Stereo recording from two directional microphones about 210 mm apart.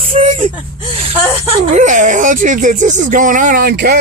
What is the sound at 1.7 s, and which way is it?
Speech, 35° right (ahead or behind).